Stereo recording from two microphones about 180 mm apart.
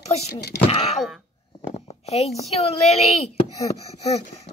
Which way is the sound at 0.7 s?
35° left (ahead or behind).